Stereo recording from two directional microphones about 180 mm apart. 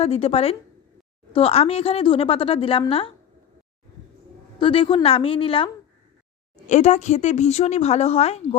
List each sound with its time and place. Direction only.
0.0 s a woman's voice: 35° left (ahead or behind)
4.6 s a woman's voice: 30° left (ahead or behind)
6.7 s a woman's voice: 40° left (ahead or behind)